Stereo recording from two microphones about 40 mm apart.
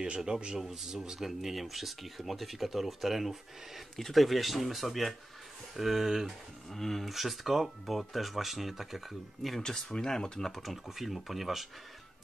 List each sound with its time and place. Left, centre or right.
0.0 s speech: centre
6.7 s speech: centre
9.6 s speech: centre
10.6 s speech: centre